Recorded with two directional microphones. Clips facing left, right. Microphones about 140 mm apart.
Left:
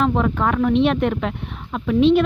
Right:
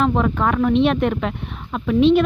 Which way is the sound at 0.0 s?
30° right (ahead or behind).